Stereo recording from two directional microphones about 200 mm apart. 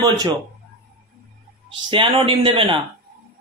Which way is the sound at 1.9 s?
25° right (ahead or behind).